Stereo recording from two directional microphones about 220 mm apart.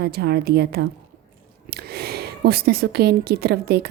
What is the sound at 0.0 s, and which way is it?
A woman's voice, 45° right (ahead or behind).